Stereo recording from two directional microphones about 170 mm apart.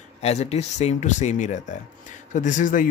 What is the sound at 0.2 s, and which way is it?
Speech, 40° left (ahead or behind).